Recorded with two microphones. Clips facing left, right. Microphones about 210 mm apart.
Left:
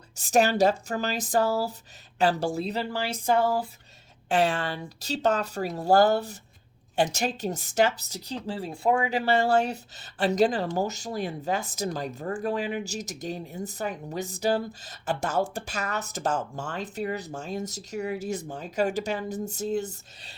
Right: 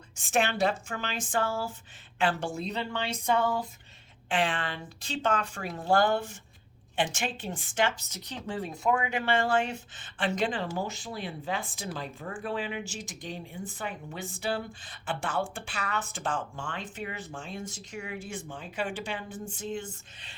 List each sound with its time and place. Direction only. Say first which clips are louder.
0.2 s speech: left 6 dB; 40° left (ahead or behind)
4.3 s speech: left 5 dB; 40° left (ahead or behind)